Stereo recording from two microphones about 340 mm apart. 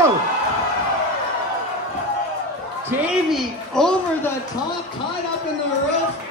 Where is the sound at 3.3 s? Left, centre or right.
Centre.